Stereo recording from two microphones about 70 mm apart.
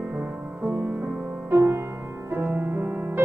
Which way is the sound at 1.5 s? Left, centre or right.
Right.